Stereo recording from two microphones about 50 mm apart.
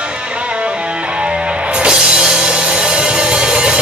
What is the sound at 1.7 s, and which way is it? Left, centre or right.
Music, centre.